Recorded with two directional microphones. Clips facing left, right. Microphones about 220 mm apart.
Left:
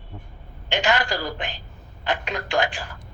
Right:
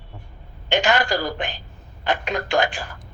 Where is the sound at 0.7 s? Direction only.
45° right (ahead or behind).